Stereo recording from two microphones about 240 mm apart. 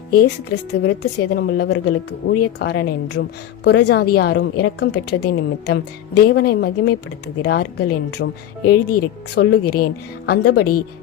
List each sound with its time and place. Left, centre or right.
0.1 s a woman's voice: left